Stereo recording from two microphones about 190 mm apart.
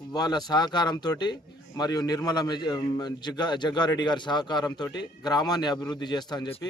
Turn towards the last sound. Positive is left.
turn(degrees=25)  # may be behind; listen again after turning